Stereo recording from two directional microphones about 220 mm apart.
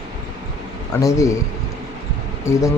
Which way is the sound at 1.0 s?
15° left (ahead or behind).